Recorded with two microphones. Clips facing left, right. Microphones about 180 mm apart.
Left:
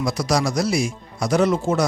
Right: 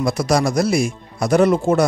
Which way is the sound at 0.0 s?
55° right (ahead or behind).